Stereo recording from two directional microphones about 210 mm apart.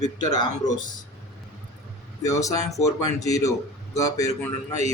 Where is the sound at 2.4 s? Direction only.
15° left (ahead or behind).